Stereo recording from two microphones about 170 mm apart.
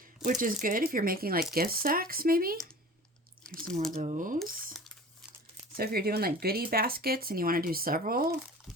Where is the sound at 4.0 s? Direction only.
45° right (ahead or behind).